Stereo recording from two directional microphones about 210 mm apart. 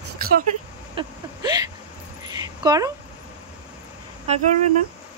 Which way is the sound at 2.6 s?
15° right (ahead or behind).